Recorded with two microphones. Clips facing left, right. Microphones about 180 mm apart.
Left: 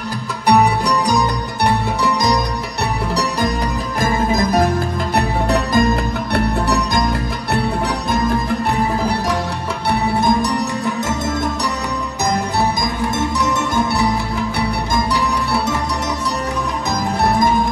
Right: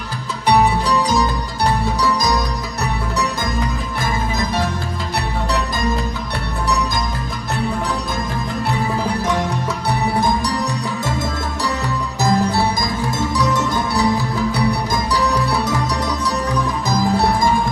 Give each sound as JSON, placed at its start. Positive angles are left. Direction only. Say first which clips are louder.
{"t": 4.0, "sound": "music", "louder": "left 6 dB", "side_deg": 40}
{"t": 5.1, "sound": "music", "louder": "left 4 dB", "side_deg": 55}